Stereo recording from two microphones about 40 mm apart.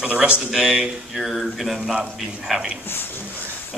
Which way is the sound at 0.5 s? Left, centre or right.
Centre.